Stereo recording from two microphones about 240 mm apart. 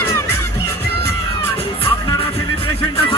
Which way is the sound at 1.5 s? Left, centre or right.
Left.